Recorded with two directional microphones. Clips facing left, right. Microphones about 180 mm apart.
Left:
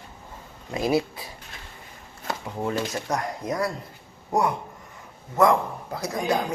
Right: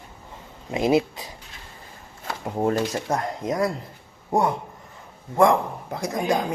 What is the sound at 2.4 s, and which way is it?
Speech, 45° right (ahead or behind).